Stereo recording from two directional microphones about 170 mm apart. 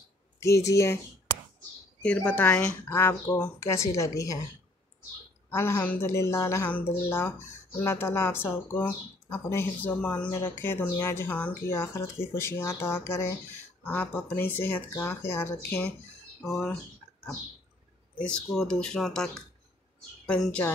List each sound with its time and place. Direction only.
0.4 s speech: 20° left (ahead or behind)
2.0 s speech: 10° left (ahead or behind)
5.5 s speech: 15° left (ahead or behind)
18.1 s speech: 5° left (ahead or behind)